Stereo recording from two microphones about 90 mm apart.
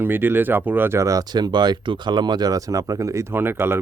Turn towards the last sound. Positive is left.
turn(degrees=-25)  # may be behind; listen again after turning